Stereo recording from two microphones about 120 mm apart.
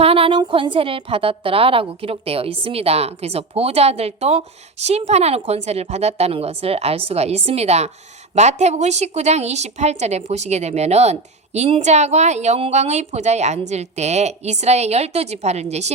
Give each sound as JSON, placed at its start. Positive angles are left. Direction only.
{"t": 0.0, "sound": "a woman's voice", "side_deg": -50}